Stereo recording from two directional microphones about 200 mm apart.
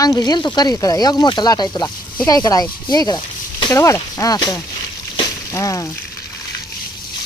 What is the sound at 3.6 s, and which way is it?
Speech, 15° left (ahead or behind).